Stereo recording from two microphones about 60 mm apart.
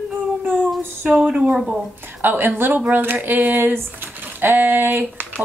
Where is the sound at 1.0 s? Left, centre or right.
Centre.